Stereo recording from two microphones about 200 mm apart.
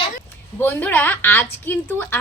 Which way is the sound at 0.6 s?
10° left (ahead or behind).